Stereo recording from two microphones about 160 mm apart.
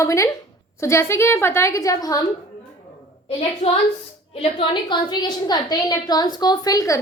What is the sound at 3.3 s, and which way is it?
A woman's voice, 40° left (ahead or behind).